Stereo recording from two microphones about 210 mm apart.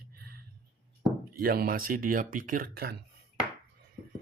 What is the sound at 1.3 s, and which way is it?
Speech, 45° right (ahead or behind).